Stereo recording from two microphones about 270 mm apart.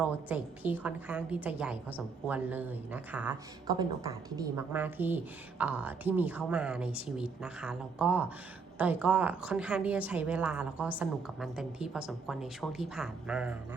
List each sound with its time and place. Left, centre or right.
0.0 s a woman's voice: centre